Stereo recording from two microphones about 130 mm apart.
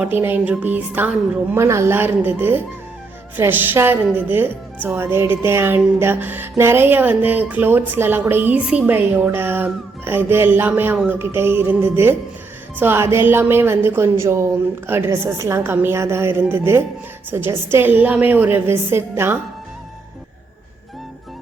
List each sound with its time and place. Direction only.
0.0 s speech: 15° right (ahead or behind)